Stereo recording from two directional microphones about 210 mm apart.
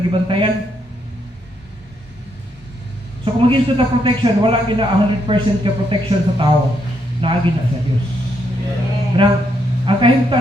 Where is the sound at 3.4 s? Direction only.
25° right (ahead or behind).